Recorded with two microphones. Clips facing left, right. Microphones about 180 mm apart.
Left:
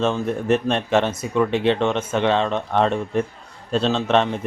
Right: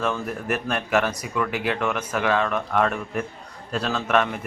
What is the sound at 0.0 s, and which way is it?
A man's voice, 25° left (ahead or behind).